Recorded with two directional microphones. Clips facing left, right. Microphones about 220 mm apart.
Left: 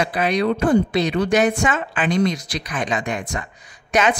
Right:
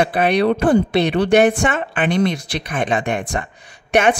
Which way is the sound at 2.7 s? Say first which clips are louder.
Right 4 dB; 55° right (ahead or behind).